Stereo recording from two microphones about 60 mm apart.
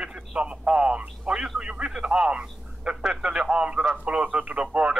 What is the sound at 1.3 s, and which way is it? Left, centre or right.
Speech, centre.